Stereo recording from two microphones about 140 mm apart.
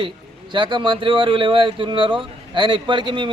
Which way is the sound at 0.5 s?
35° right (ahead or behind).